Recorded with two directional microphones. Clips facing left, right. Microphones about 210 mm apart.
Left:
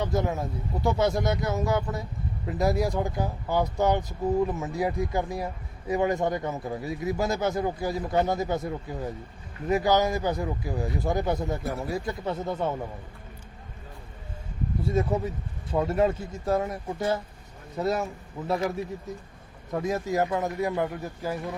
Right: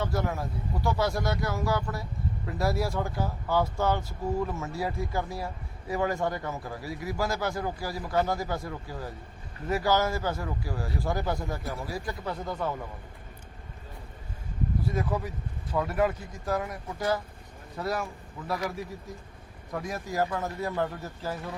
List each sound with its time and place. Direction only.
0.0 s speech: 20° left (ahead or behind)
14.8 s speech: 25° left (ahead or behind)
19.7 s speech: 20° left (ahead or behind)